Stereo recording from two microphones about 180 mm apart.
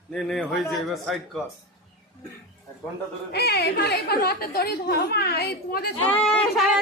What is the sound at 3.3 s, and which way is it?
A woman's voice, 65° left (ahead or behind).